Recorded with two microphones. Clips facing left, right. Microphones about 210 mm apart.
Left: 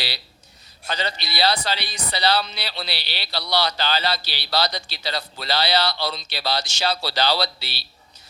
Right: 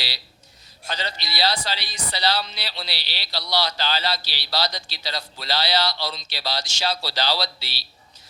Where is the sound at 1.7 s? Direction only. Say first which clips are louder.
Left 3 dB; 55° left (ahead or behind).